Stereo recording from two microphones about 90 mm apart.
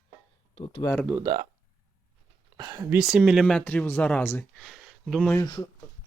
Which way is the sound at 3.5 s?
15° left (ahead or behind).